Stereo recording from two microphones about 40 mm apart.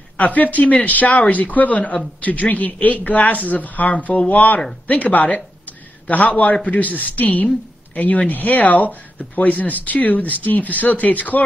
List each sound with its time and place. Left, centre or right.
0.2 s speech: left